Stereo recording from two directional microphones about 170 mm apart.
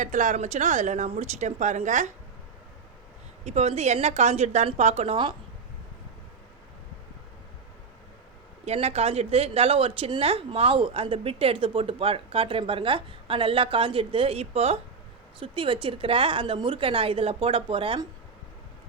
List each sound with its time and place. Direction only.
0.0 s a woman's voice: 50° right (ahead or behind)
3.4 s a woman's voice: 40° right (ahead or behind)
8.6 s a woman's voice: 40° right (ahead or behind)